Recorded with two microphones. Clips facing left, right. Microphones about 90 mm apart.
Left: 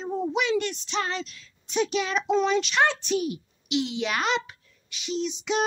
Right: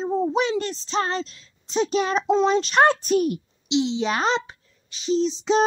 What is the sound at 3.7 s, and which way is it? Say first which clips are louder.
Speech: right 5 dB; 25° right (ahead or behind).